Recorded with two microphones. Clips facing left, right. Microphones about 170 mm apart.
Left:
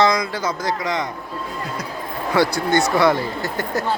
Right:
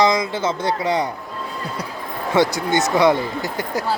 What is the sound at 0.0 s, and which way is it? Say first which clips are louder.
Speech: right 1 dB; 20° right (ahead or behind).